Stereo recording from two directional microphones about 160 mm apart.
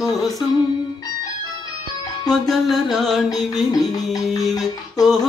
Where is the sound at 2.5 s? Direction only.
Centre (ahead or behind).